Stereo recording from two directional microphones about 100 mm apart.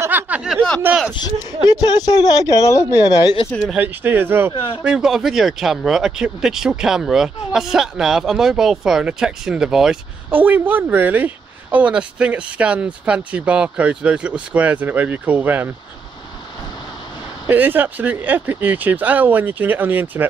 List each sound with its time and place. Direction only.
0.0 s snicker: 20° right (ahead or behind)
1.1 s speech: 40° left (ahead or behind)
3.7 s speech: 20° right (ahead or behind)
4.8 s speech: 5° right (ahead or behind)
10.3 s speech: 20° right (ahead or behind)
17.5 s speech: 20° right (ahead or behind)